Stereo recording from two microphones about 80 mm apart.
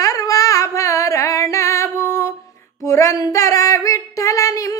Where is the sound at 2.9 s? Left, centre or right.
Left.